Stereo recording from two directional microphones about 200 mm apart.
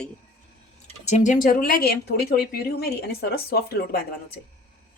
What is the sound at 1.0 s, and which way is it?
A woman's voice, 35° left (ahead or behind).